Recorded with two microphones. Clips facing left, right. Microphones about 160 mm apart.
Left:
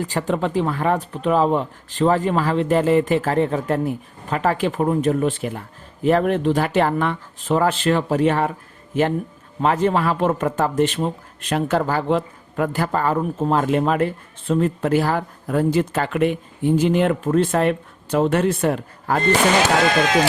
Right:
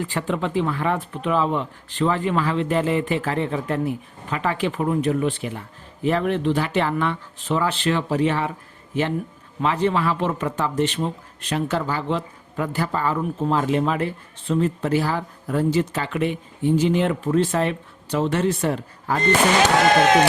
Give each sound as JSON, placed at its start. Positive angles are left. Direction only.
{"t": 0.0, "sound": "speech", "side_deg": 40}
{"t": 9.6, "sound": "speech", "side_deg": 45}